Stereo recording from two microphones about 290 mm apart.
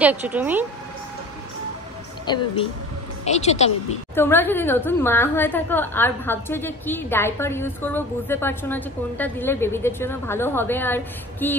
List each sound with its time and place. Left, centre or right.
0.0 s speech: centre
2.2 s a woman's voice: centre
4.1 s a woman's voice: centre